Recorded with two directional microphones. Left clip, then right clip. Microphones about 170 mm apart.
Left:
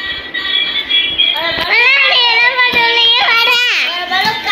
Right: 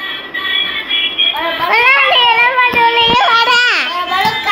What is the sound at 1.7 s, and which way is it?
Child singing, 55° right (ahead or behind).